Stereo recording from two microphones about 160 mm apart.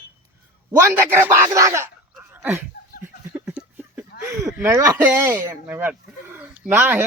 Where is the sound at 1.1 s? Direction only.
20° right (ahead or behind).